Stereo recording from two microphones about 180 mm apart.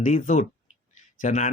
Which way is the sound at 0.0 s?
45° left (ahead or behind).